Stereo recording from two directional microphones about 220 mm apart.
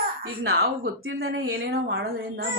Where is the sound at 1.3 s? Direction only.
55° right (ahead or behind).